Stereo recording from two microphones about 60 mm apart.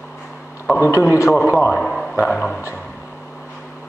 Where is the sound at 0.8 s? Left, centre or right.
Left.